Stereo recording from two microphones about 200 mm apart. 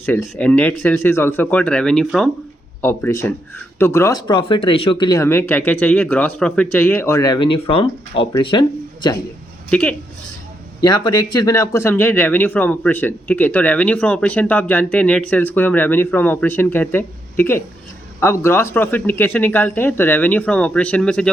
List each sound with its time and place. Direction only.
0.0 s speech: 10° left (ahead or behind)
2.8 s speech: 15° left (ahead or behind)
9.6 s a woman's voice: 5° left (ahead or behind)
10.8 s speech: 20° left (ahead or behind); by 21.2 s 5° left (ahead or behind)